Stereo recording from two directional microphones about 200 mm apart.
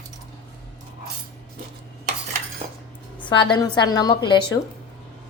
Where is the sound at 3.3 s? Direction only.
25° left (ahead or behind).